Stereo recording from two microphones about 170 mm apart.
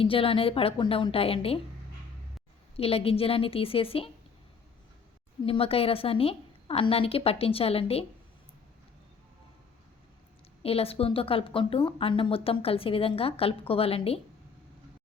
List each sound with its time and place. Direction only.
0.0 s a woman's voice: 30° left (ahead or behind)
2.7 s a woman's voice: 35° left (ahead or behind)
5.5 s a woman's voice: 35° left (ahead or behind)
10.6 s a woman's voice: 35° left (ahead or behind)